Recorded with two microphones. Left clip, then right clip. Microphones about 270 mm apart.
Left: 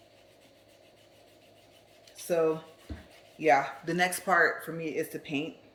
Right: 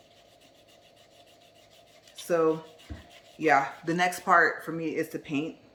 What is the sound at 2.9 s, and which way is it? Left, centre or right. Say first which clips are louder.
Rub: left 1 dB; left.